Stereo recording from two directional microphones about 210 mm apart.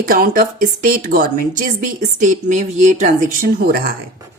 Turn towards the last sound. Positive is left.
turn(degrees=-45)  # may be behind; listen again after turning